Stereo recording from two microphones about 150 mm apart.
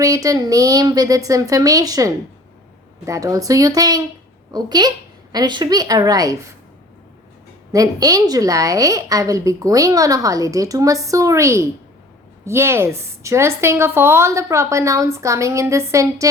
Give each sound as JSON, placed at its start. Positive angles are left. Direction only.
{"t": 0.0, "sound": "a woman's voice", "side_deg": -20}
{"t": 7.7, "sound": "a woman's voice", "side_deg": -25}